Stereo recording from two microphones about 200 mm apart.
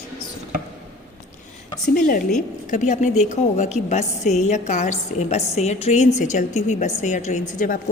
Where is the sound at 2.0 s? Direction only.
45° left (ahead or behind).